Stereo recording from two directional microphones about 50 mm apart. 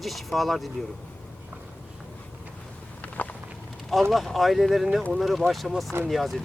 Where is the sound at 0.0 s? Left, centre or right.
Centre.